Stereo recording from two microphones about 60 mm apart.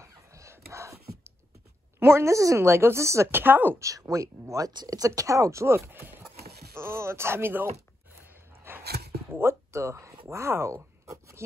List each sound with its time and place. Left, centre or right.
0.0 s a sound: right
2.0 s a woman's voice: right
3.3 s speech: right
4.0 s speech: right
5.9 s speech: right
8.2 s a sound: right
9.3 s speech: right